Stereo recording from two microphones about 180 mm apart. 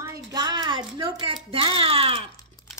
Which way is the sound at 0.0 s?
20° right (ahead or behind).